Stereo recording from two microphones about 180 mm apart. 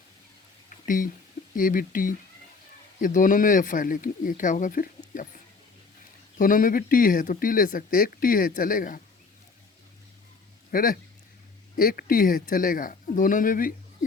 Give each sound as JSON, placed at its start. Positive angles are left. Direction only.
{"t": 0.9, "sound": "speech", "side_deg": 50}
{"t": 6.4, "sound": "speech", "side_deg": 50}
{"t": 10.7, "sound": "speech", "side_deg": 50}